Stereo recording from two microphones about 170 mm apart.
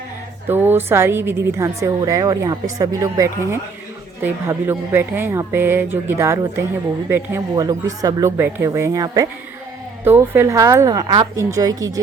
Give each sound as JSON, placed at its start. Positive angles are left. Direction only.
{"t": 0.4, "sound": "speech", "side_deg": -10}